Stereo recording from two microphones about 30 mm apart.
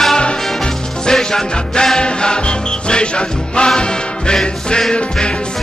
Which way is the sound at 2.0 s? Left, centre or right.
Left.